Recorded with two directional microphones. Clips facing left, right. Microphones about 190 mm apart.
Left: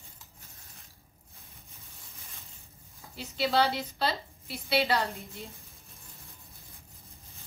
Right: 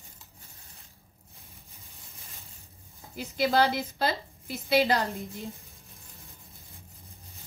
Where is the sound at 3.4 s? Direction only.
45° right (ahead or behind).